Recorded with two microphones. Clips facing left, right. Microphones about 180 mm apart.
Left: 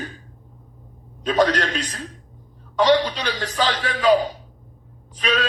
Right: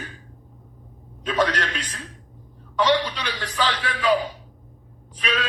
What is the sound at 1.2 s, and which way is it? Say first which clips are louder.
A man's voice: left 4 dB; 35° left (ahead or behind).